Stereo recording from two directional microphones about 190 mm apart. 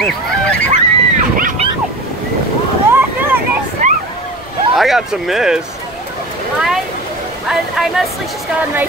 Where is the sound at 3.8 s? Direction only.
40° right (ahead or behind).